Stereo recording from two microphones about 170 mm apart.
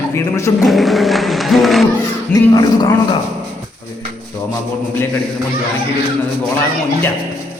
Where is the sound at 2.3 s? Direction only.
20° left (ahead or behind).